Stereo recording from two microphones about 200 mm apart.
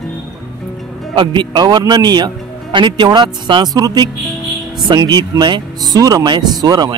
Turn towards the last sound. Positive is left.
turn(degrees=-20)  # may be behind; listen again after turning